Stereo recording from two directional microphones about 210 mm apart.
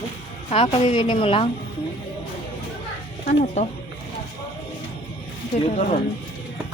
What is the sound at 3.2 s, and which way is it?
Speech, 35° left (ahead or behind).